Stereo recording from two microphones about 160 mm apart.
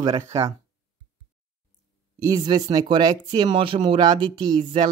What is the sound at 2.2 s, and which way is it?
Speech, 25° right (ahead or behind).